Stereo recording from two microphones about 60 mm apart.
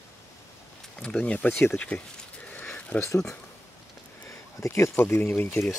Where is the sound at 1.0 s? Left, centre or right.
Centre.